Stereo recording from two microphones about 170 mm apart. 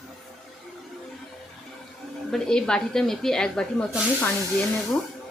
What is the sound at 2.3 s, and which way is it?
Speech, 5° left (ahead or behind).